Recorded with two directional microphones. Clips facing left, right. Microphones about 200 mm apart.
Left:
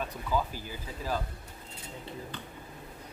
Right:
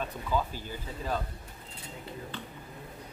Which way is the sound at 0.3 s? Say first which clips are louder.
Even; 5° left (ahead or behind).